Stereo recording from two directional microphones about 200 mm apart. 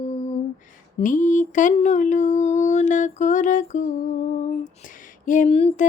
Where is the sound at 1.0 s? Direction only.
40° left (ahead or behind).